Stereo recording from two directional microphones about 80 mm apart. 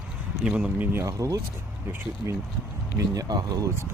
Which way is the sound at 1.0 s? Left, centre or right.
Right.